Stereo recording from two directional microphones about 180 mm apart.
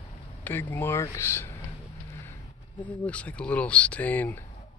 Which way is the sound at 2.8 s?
10° left (ahead or behind).